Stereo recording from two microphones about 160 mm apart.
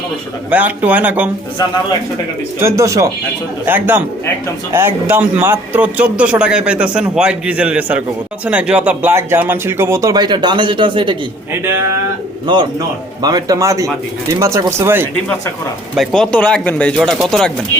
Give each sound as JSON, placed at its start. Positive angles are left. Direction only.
{"t": 0.5, "sound": "a man's voice", "side_deg": -10}
{"t": 2.6, "sound": "a man's voice", "side_deg": -15}
{"t": 11.6, "sound": "a man's voice", "side_deg": -15}
{"t": 13.2, "sound": "a man's voice", "side_deg": -20}
{"t": 16.0, "sound": "speech", "side_deg": 5}